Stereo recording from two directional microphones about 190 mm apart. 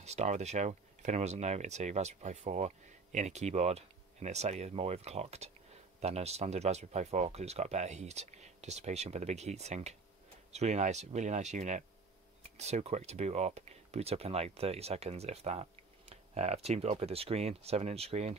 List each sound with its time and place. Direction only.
0.0 s speech: 35° right (ahead or behind)